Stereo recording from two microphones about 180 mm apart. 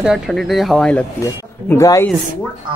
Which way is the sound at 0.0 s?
Centre (ahead or behind).